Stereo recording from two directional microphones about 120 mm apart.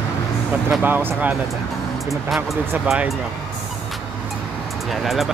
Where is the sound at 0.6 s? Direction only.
15° right (ahead or behind).